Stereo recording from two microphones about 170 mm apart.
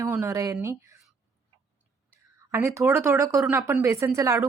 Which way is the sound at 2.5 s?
15° right (ahead or behind).